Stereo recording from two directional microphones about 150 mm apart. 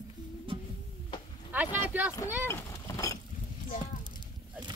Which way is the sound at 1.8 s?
10° right (ahead or behind).